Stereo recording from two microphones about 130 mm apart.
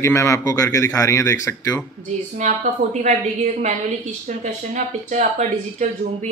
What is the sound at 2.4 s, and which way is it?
A woman's voice, 75° right (ahead or behind).